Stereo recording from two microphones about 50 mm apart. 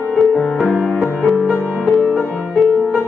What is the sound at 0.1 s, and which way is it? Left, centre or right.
Music, centre.